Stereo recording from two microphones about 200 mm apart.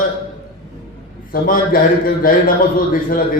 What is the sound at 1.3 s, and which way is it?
A man's voice, 45° left (ahead or behind).